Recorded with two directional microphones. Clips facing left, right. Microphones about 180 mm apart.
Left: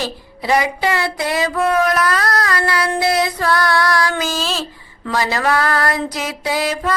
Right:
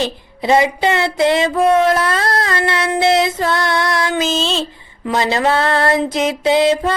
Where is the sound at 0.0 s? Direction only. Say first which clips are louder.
Right 4 dB; 25° right (ahead or behind).